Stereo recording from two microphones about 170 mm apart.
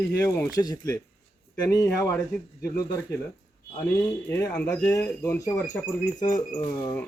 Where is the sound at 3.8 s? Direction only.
15° left (ahead or behind).